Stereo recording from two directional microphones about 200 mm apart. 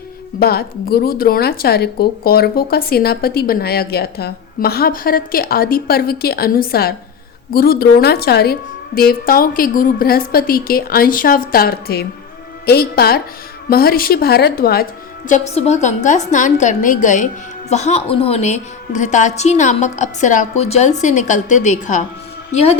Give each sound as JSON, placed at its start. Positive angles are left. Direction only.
{"t": 0.3, "sound": "speech", "side_deg": 50}
{"t": 15.3, "sound": "a woman's voice", "side_deg": 35}